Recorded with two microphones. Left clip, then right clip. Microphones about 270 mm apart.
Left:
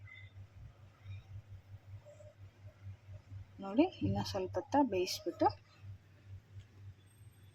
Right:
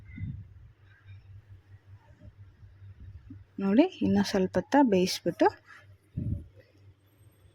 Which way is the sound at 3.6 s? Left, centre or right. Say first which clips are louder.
Right 8 dB; right.